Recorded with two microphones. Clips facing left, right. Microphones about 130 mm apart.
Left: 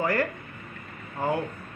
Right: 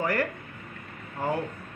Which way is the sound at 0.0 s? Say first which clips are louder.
Left 2 dB; 40° left (ahead or behind).